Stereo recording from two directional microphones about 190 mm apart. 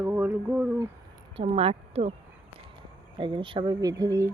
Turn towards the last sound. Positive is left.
turn(degrees=-20)  # may be behind; listen again after turning